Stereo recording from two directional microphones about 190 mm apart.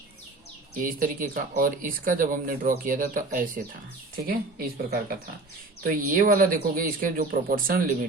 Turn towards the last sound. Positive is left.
turn(degrees=-50)  # may be behind; listen again after turning